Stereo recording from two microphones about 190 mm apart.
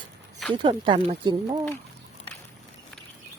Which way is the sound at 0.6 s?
25° right (ahead or behind).